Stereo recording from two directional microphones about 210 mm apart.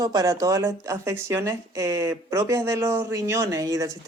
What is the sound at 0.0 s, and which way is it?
Speech, 20° right (ahead or behind).